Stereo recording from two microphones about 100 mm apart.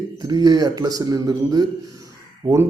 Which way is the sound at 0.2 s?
40° right (ahead or behind).